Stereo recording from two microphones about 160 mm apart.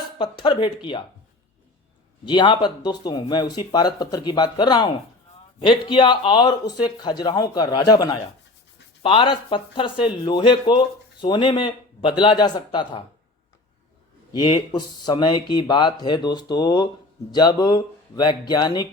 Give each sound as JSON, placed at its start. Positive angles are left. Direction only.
{"t": 0.2, "sound": "speech", "side_deg": 30}
{"t": 2.2, "sound": "speech", "side_deg": 30}
{"t": 14.3, "sound": "speech", "side_deg": 30}